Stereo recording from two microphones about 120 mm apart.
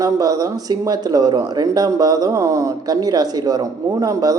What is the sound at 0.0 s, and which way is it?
Speech, 30° right (ahead or behind).